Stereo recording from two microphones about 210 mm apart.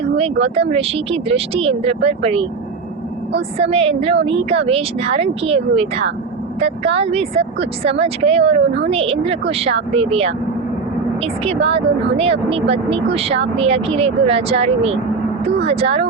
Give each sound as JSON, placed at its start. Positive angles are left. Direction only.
{"t": 0.4, "sound": "speech", "side_deg": -30}
{"t": 3.6, "sound": "speech", "side_deg": -30}